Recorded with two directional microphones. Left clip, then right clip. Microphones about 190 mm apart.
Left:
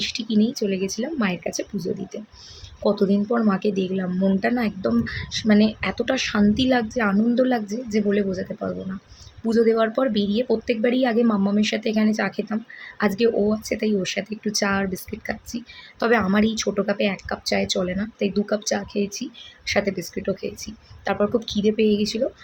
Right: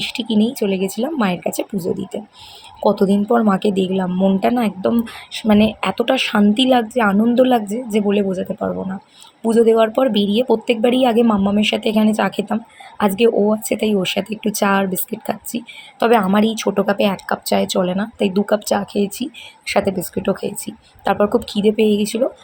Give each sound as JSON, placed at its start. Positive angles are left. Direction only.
{"t": 0.0, "sound": "a woman's voice", "side_deg": -10}
{"t": 1.7, "sound": "speech", "side_deg": -35}
{"t": 2.8, "sound": "a woman's voice", "side_deg": -10}
{"t": 9.5, "sound": "a woman's voice", "side_deg": -10}